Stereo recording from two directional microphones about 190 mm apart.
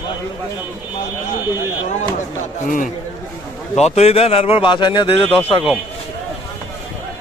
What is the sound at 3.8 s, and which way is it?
A man's voice, 35° left (ahead or behind).